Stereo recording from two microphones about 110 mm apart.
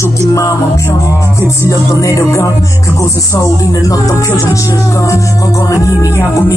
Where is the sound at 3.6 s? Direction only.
30° left (ahead or behind).